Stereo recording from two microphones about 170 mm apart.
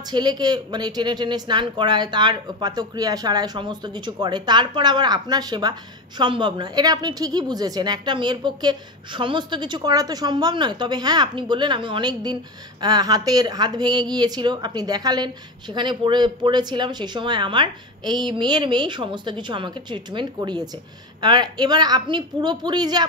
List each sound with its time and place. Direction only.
0.1 s speech: 25° right (ahead or behind)